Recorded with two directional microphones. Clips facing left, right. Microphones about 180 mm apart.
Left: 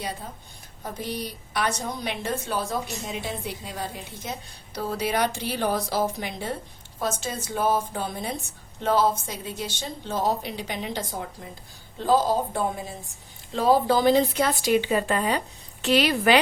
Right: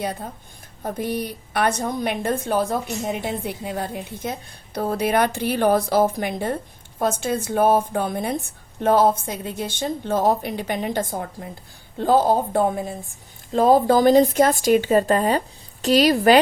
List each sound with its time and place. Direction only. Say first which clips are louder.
0.0 s a woman's voice: right 6 dB; 55° right (ahead or behind)